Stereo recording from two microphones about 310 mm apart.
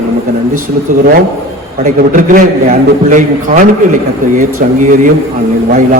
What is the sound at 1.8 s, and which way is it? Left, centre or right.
A man's voice, right.